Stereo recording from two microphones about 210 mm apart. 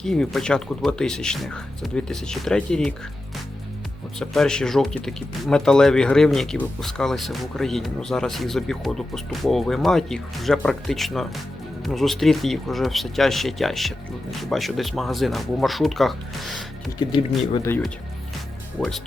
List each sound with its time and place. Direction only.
0.0 s speech: centre (ahead or behind)
4.2 s speech: 5° left (ahead or behind)
17.1 s speech: 20° left (ahead or behind)
17.7 s speech: 10° left (ahead or behind)